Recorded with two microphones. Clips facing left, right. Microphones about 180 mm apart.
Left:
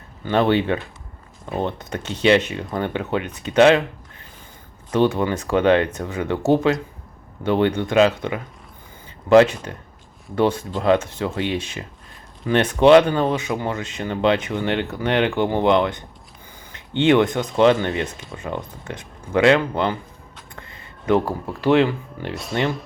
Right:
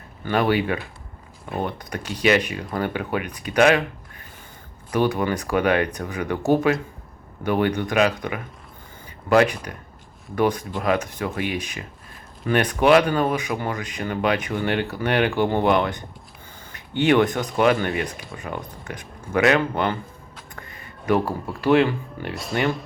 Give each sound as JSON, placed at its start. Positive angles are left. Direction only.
{"t": 0.3, "sound": "speech", "side_deg": 25}
{"t": 4.9, "sound": "speech", "side_deg": 25}
{"t": 20.6, "sound": "a sound", "side_deg": 25}
{"t": 21.6, "sound": "speech", "side_deg": 20}